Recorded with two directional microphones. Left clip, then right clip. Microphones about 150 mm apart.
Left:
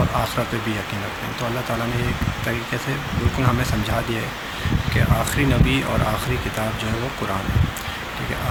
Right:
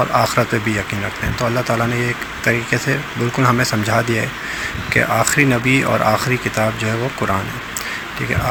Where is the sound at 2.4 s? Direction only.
40° right (ahead or behind).